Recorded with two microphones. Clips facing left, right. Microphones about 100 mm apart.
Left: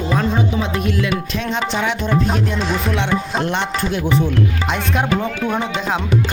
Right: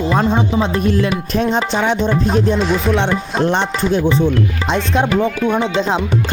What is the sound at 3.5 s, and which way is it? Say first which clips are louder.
Speech: right 4 dB; 35° right (ahead or behind).